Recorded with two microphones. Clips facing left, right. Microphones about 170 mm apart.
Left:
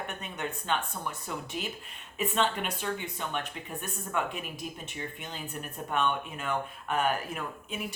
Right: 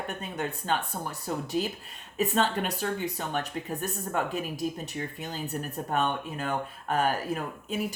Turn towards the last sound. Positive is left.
turn(degrees=-35)  # may be behind; listen again after turning